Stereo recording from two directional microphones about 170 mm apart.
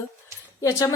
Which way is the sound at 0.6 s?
20° left (ahead or behind).